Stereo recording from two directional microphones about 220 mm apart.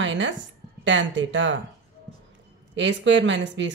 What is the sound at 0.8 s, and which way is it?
Speech, 55° right (ahead or behind).